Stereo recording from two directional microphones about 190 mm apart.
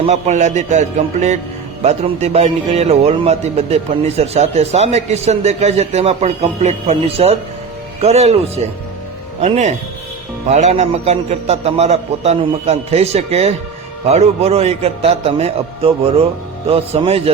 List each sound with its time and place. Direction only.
0.0 s a man's voice: 35° right (ahead or behind)